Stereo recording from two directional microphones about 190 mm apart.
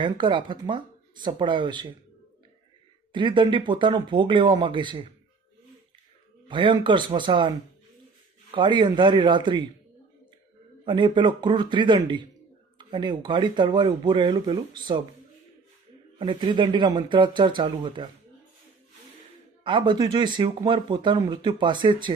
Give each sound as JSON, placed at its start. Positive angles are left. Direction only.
{"t": 0.0, "sound": "speech", "side_deg": -25}
{"t": 3.1, "sound": "speech", "side_deg": -25}
{"t": 6.5, "sound": "speech", "side_deg": -25}
{"t": 8.5, "sound": "speech", "side_deg": -25}
{"t": 10.8, "sound": "speech", "side_deg": -25}
{"t": 16.1, "sound": "speech", "side_deg": -25}
{"t": 19.6, "sound": "speech", "side_deg": -25}